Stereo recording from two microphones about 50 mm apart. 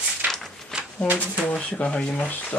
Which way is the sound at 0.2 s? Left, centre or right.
Right.